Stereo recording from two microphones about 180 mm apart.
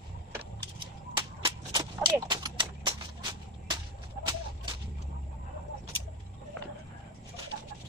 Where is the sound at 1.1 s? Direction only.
25° right (ahead or behind).